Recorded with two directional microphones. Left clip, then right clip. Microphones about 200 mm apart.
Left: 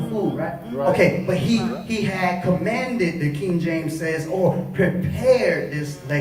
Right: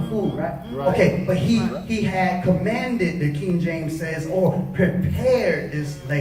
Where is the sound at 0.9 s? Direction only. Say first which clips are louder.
Right 1 dB; 50° left (ahead or behind).